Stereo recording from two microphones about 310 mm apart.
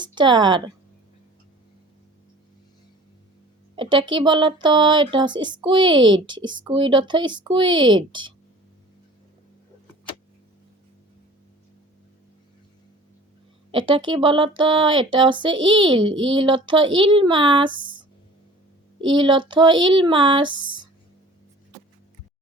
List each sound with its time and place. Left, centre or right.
0.0 s speech: centre
3.8 s speech: centre
13.7 s speech: centre
19.0 s speech: centre